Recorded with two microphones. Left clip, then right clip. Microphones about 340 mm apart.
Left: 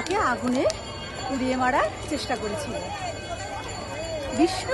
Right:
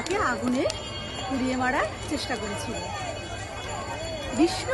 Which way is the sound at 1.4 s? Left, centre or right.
Centre.